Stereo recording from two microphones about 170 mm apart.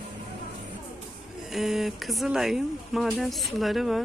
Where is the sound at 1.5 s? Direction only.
Centre (ahead or behind).